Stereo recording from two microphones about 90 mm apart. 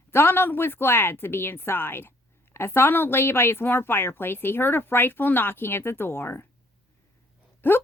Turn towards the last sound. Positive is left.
turn(degrees=25)  # may be behind; listen again after turning